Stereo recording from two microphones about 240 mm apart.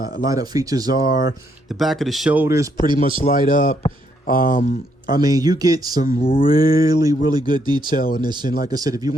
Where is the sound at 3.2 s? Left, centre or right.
Left.